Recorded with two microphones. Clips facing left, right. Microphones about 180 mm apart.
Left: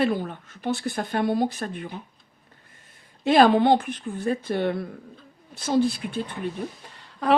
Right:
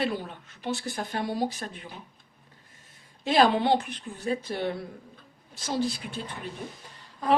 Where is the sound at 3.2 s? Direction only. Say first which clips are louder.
Left 5 dB; 55° left (ahead or behind).